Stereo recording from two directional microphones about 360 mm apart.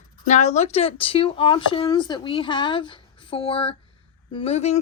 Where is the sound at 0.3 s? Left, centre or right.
Centre.